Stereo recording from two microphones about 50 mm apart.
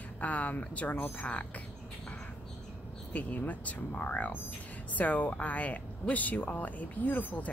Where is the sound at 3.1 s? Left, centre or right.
Left.